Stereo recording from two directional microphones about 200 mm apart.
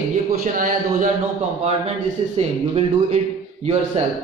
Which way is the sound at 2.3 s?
30° right (ahead or behind).